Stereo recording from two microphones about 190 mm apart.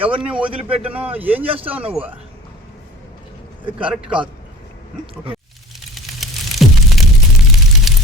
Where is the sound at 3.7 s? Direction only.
5° right (ahead or behind).